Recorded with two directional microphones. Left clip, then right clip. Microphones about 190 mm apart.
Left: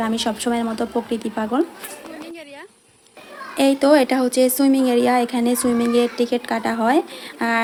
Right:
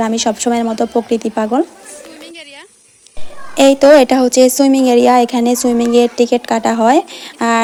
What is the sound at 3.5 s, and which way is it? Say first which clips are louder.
Speech: right 9 dB; 35° right (ahead or behind).